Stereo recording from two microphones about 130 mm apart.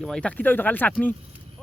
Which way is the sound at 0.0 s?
5° left (ahead or behind).